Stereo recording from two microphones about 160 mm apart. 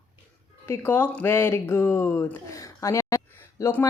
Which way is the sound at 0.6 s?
15° left (ahead or behind).